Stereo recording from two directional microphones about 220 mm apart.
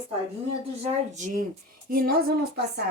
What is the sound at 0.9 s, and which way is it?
Speech, 35° right (ahead or behind).